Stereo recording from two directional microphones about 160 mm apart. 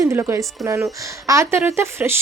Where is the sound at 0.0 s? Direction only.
15° right (ahead or behind).